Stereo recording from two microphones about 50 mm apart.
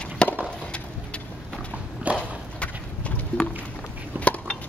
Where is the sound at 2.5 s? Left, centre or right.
Left.